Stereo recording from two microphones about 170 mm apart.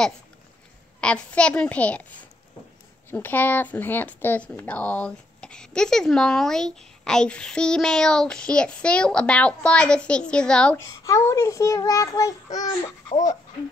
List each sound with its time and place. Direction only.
1.0 s a child's voice: 5° left (ahead or behind)
3.1 s speech: 10° left (ahead or behind)
10.8 s a child's voice: 15° left (ahead or behind)